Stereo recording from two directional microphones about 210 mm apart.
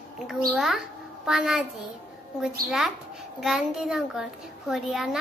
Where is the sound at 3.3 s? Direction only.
Centre (ahead or behind).